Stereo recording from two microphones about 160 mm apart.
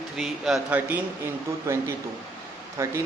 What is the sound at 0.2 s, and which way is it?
Speech, centre (ahead or behind).